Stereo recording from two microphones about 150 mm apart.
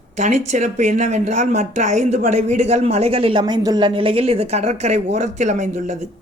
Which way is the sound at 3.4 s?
25° right (ahead or behind).